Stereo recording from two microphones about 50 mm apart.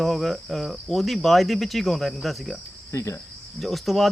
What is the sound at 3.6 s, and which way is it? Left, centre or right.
Speech, centre.